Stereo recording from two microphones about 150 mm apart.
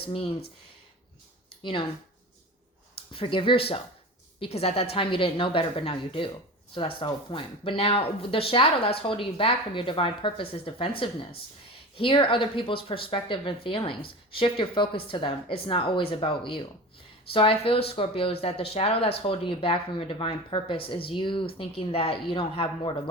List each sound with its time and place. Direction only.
3.1 s speech: 35° left (ahead or behind)